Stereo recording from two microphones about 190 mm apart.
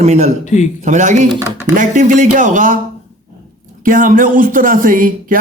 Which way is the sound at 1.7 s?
40° right (ahead or behind).